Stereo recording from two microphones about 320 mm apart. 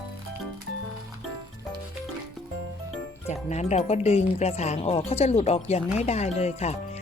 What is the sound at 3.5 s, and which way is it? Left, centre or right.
Speech, left.